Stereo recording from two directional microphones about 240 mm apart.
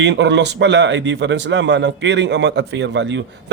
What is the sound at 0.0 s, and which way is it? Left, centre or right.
A man's voice, right.